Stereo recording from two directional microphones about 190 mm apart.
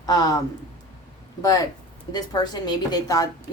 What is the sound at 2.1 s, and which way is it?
A woman's voice, 20° left (ahead or behind).